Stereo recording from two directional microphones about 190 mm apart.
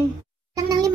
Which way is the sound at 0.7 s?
20° right (ahead or behind).